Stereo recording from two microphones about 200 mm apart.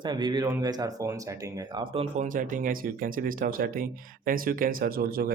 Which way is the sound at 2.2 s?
40° right (ahead or behind).